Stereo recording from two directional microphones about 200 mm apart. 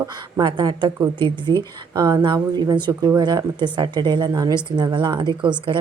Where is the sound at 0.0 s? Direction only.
25° right (ahead or behind).